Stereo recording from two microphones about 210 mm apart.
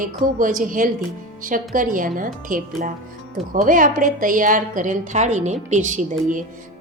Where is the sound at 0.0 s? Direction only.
40° right (ahead or behind).